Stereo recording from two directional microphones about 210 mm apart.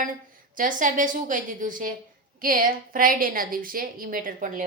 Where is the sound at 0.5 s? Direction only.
40° right (ahead or behind).